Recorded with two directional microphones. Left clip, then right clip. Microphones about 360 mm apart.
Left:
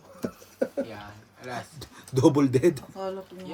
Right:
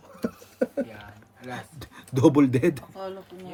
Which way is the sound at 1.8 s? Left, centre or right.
Right.